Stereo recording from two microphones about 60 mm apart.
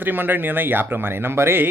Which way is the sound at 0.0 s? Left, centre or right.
Right.